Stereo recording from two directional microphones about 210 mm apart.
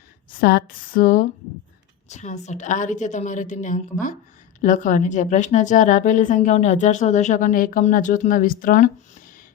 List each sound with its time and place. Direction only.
0.3 s a woman's voice: 45° left (ahead or behind)